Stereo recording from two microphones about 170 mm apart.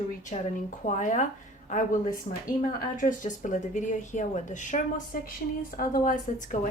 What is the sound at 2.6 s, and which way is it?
A woman's voice, 50° left (ahead or behind).